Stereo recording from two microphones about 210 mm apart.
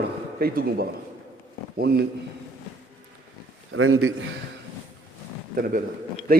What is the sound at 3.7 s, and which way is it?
Mantra, 75° right (ahead or behind).